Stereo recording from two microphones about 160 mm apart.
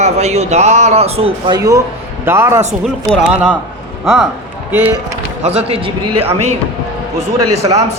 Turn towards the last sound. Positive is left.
turn(degrees=-30)  # may be behind; listen again after turning